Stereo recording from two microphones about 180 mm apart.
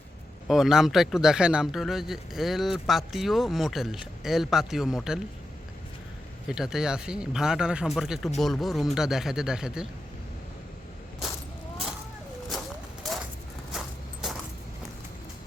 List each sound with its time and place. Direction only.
0.4 s speech: centre (ahead or behind)
6.5 s speech: 5° right (ahead or behind)
13.7 s a sound: centre (ahead or behind)